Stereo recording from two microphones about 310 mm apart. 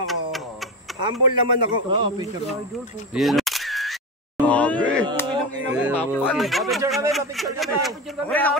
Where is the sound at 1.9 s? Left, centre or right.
Centre.